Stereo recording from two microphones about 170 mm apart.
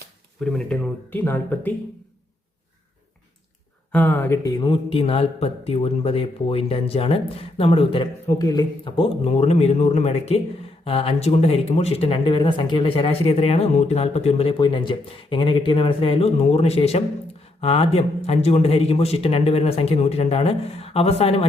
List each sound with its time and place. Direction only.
0.4 s speech: 5° left (ahead or behind)
3.9 s speech: 10° left (ahead or behind); by 21.4 s 35° left (ahead or behind)